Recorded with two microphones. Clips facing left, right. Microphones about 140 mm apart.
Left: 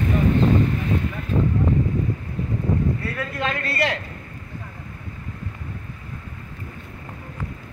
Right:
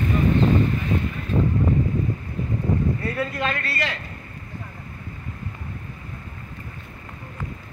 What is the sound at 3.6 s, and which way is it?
Speech, 60° left (ahead or behind).